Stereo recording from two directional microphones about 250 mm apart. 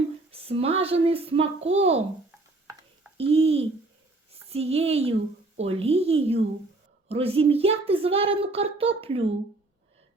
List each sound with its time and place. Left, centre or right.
0.3 s speech: right
3.2 s speech: right